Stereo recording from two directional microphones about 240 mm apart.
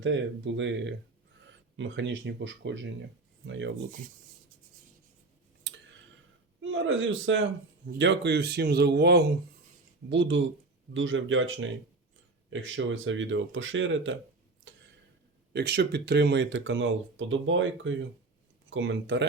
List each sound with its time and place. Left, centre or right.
0.0 s speech: right
5.7 s tick: right
6.6 s a man's voice: right
14.7 s a sound: right
15.5 s speech: right